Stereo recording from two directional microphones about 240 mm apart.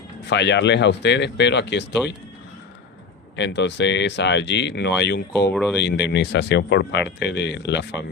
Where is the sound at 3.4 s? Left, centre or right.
Left.